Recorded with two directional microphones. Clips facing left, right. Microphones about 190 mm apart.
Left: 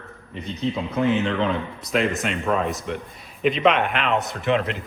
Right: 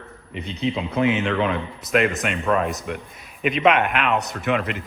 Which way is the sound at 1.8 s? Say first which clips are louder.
Right 3 dB; centre (ahead or behind).